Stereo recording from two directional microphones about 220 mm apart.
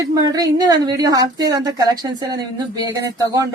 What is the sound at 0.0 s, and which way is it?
A woman's voice, 15° right (ahead or behind).